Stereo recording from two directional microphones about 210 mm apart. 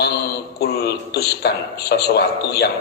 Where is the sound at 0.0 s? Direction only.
50° left (ahead or behind).